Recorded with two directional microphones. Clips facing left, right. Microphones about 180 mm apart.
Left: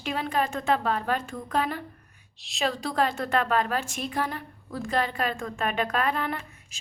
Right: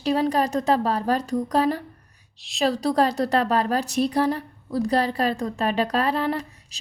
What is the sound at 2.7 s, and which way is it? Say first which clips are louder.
Speech: right 7 dB; 40° right (ahead or behind).